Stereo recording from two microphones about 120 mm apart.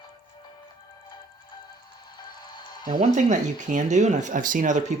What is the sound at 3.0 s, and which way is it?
Speech, 90° right.